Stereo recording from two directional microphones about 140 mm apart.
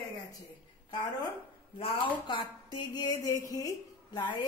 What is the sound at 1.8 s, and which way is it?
A man's voice, 35° left (ahead or behind).